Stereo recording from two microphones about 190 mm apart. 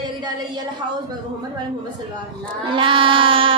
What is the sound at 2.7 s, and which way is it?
Child singing, 25° right (ahead or behind).